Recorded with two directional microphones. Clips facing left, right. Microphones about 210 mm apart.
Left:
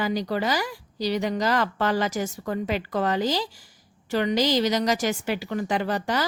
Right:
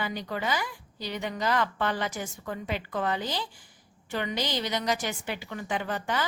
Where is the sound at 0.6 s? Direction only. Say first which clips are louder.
Left 9 dB; 90° left.